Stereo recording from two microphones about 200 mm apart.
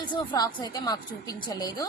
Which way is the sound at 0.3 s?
20° left (ahead or behind).